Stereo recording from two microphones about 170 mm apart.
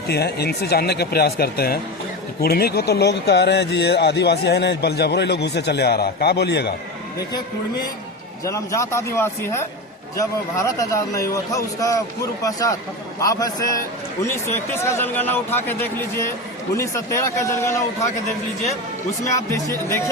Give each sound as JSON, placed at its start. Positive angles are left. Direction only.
{"t": 0.1, "sound": "speech", "side_deg": 70}
{"t": 8.4, "sound": "a man's voice", "side_deg": 15}